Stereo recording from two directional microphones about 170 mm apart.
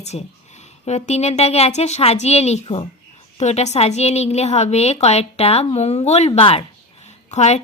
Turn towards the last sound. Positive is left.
turn(degrees=40)  # may be behind; listen again after turning